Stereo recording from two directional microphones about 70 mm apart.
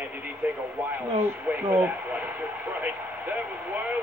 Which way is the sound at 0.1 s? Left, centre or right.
Right.